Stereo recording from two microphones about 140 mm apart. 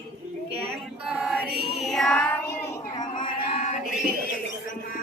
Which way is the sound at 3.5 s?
55° left (ahead or behind).